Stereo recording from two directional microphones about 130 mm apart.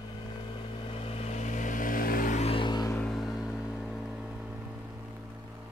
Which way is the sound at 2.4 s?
40° left (ahead or behind).